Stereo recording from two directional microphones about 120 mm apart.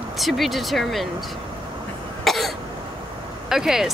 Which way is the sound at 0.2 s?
Centre (ahead or behind).